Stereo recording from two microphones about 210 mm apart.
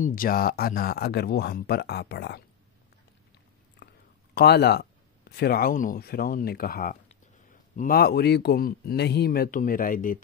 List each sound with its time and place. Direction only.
0.0 s speech: 40° left (ahead or behind)
3.8 s a sound: 50° left (ahead or behind)
4.4 s speech: 50° left (ahead or behind)